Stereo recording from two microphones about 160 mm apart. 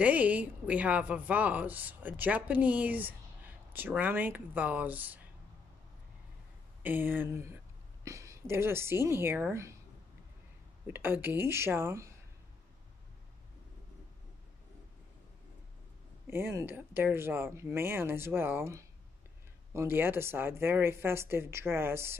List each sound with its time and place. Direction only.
0.0 s a woman's voice: 10° right (ahead or behind)
6.8 s a woman's voice: 10° right (ahead or behind)
10.9 s a woman's voice: 15° right (ahead or behind)
16.3 s a woman's voice: 15° right (ahead or behind)